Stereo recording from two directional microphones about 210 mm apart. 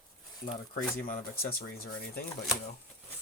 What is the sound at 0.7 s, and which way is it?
Speech, 40° left (ahead or behind).